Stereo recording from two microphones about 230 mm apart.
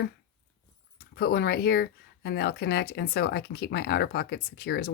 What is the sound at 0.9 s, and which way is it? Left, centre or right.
Speech, left.